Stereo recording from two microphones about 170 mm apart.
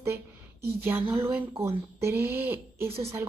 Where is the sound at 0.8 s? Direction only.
10° right (ahead or behind).